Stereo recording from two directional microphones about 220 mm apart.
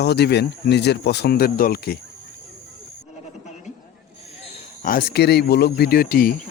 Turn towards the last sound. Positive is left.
turn(degrees=40)  # may be behind; listen again after turning